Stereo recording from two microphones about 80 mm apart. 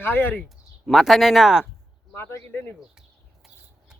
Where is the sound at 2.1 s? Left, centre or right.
Left.